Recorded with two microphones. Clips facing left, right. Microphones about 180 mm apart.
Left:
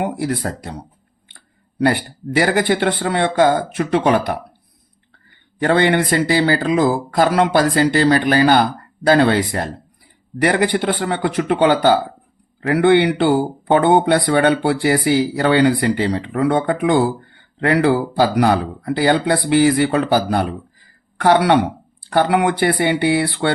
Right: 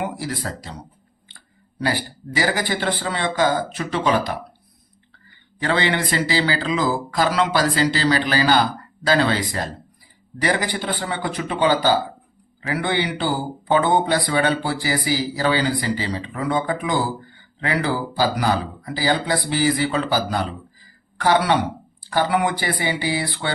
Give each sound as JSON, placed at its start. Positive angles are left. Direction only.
{"t": 0.0, "sound": "speech", "side_deg": 60}
{"t": 1.8, "sound": "speech", "side_deg": 60}
{"t": 5.5, "sound": "speech", "side_deg": 55}